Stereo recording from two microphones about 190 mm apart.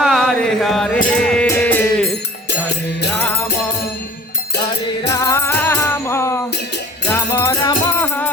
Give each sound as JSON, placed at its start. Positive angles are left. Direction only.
{"t": 0.0, "sound": "a sound", "side_deg": 0}
{"t": 1.0, "sound": "music", "side_deg": 5}
{"t": 3.1, "sound": "music", "side_deg": 10}
{"t": 5.0, "sound": "music", "side_deg": 15}